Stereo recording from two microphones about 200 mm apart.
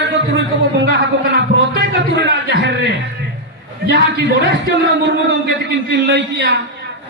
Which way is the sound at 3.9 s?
65° right (ahead or behind).